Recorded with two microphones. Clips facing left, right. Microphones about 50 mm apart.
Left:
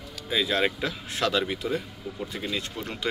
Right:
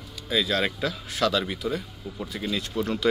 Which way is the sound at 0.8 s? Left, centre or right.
Left.